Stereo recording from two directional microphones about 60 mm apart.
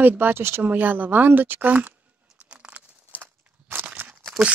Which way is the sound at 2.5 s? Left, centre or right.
Right.